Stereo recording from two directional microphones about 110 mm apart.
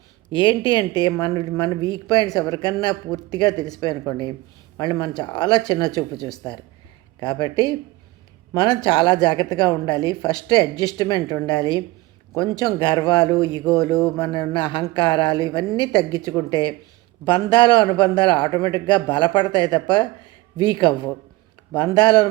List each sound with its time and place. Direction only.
0.3 s a man's voice: 45° left (ahead or behind)